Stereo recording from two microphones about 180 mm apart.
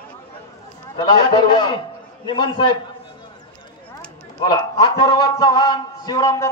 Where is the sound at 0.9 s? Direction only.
25° left (ahead or behind).